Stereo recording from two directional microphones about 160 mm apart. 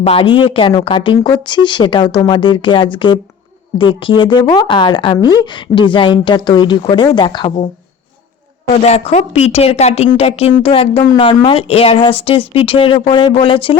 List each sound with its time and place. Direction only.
0.0 s speech: 35° left (ahead or behind)
8.7 s speech: 40° left (ahead or behind)